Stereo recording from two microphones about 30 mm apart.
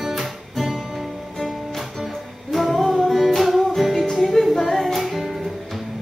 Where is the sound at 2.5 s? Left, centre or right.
Centre.